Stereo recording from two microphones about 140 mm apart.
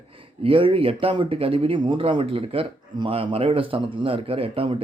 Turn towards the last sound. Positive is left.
turn(degrees=-40)  # may be behind; listen again after turning